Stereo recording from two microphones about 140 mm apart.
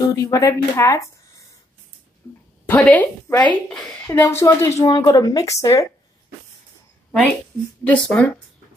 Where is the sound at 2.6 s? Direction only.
10° left (ahead or behind).